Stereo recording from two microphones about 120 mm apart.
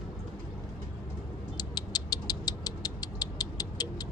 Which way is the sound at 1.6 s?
35° left (ahead or behind).